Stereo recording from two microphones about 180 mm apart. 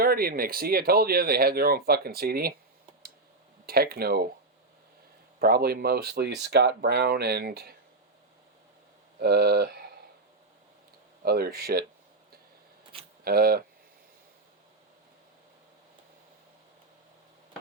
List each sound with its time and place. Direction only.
0.0 s speech: 55° right (ahead or behind)
3.7 s speech: 60° right (ahead or behind)
5.4 s speech: 60° right (ahead or behind)
9.1 s speech: 60° right (ahead or behind)
11.2 s speech: 60° right (ahead or behind)
13.2 s speech: 55° right (ahead or behind)